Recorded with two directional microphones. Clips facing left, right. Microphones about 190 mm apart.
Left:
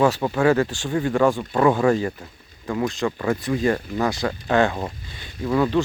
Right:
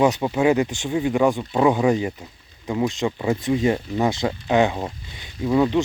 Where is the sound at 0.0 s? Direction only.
20° right (ahead or behind).